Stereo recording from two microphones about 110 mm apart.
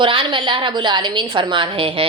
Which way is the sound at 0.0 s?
50° right (ahead or behind).